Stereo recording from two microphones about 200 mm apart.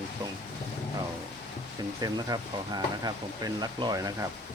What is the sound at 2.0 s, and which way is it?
Speech, 20° right (ahead or behind).